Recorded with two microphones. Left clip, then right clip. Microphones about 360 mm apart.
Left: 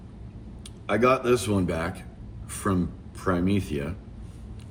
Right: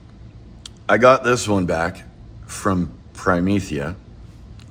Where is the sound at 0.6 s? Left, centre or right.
Centre.